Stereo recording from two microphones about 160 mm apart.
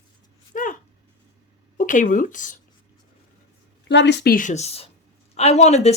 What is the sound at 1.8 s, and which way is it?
Speech, 55° left (ahead or behind).